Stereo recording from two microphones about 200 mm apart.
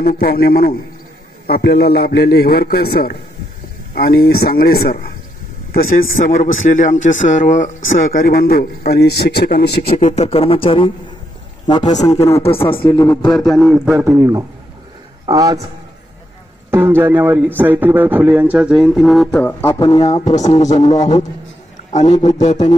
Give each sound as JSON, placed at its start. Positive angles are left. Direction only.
{"t": 0.0, "sound": "a man's voice", "side_deg": 50}
{"t": 9.8, "sound": "speech", "side_deg": 35}
{"t": 12.0, "sound": "a man's voice", "side_deg": 15}
{"t": 13.4, "sound": "a man's voice", "side_deg": 0}
{"t": 16.7, "sound": "a man's voice", "side_deg": -10}
{"t": 20.2, "sound": "a man's voice", "side_deg": 35}